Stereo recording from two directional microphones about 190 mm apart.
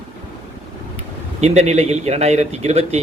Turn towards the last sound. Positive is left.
turn(degrees=-35)  # may be behind; listen again after turning